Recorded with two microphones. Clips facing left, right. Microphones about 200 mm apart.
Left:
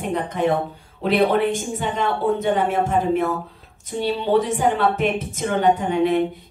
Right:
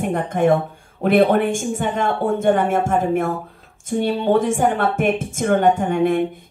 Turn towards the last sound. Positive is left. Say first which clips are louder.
# right 1 dB
turn(degrees=-50)  # may be behind; listen again after turning